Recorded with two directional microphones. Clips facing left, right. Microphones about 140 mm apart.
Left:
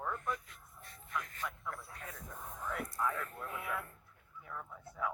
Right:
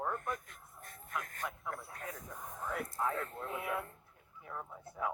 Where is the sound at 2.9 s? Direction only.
30° right (ahead or behind).